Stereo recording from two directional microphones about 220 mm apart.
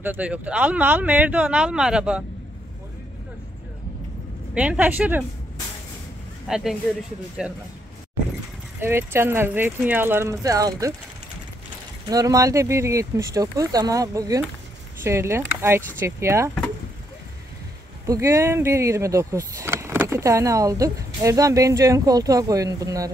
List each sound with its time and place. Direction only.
0.0 s speech: 5° right (ahead or behind)
4.6 s speech: 5° right (ahead or behind)
6.4 s speech: centre (ahead or behind)
8.7 s speech: 10° right (ahead or behind)
12.1 s speech: 15° right (ahead or behind)
18.0 s speech: 15° right (ahead or behind)